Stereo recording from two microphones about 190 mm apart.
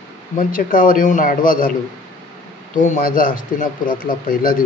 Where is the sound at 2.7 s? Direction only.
45° left (ahead or behind).